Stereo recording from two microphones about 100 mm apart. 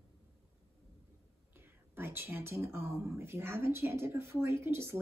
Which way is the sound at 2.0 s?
20° right (ahead or behind).